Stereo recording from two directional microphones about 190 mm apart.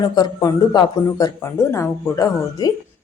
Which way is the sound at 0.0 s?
20° left (ahead or behind).